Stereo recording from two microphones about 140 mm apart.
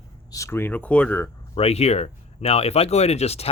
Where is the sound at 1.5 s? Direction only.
45° left (ahead or behind).